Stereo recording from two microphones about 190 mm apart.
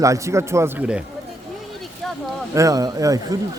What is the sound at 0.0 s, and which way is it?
A man's voice, 15° right (ahead or behind).